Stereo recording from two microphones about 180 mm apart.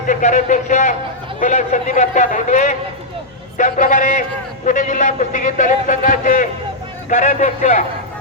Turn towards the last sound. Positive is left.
turn(degrees=40)  # may be behind; listen again after turning